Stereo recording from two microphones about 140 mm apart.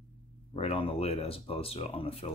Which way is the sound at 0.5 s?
45° left (ahead or behind).